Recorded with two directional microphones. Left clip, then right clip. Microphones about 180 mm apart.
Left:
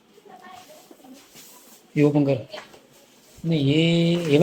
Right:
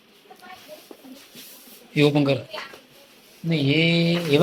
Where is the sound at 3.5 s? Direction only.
30° left (ahead or behind).